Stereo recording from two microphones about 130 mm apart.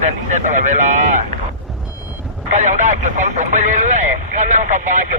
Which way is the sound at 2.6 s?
70° right (ahead or behind).